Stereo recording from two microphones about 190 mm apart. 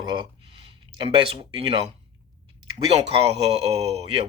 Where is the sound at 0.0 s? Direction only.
25° right (ahead or behind).